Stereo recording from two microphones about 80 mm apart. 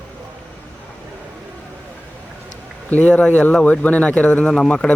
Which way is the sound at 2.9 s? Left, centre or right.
Centre.